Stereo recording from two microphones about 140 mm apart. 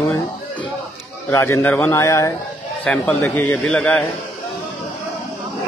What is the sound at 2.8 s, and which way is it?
A man's voice, 10° left (ahead or behind).